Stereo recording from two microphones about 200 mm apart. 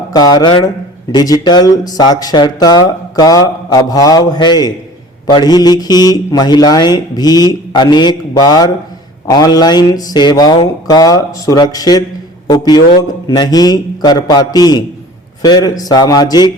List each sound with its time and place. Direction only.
0.1 s speech: 20° left (ahead or behind)